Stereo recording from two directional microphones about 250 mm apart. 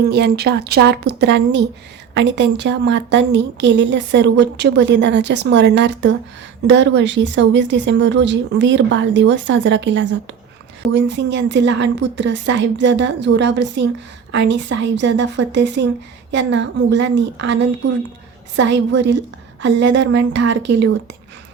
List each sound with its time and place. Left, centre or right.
0.1 s a woman's voice: right